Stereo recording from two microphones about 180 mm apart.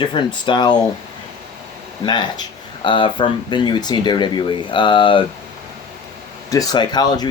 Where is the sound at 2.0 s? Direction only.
25° left (ahead or behind).